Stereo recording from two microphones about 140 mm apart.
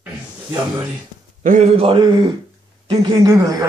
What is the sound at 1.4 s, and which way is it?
A man's voice, 60° right (ahead or behind).